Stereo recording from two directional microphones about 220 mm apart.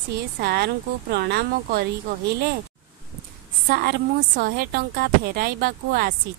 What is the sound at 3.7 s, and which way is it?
Speech, 45° right (ahead or behind).